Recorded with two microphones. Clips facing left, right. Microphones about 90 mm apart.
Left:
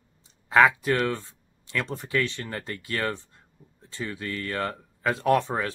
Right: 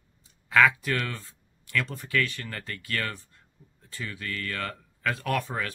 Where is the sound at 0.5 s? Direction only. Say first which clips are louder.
Left 3 dB; 25° left (ahead or behind).